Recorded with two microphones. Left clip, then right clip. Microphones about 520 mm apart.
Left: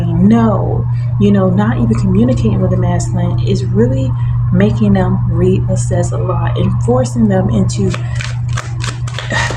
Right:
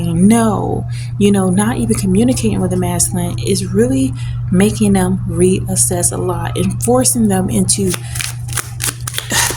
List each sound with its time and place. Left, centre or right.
0.0 s music: right
1.2 s a woman's voice: right